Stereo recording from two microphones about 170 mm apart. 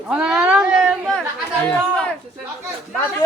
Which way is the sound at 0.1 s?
5° right (ahead or behind).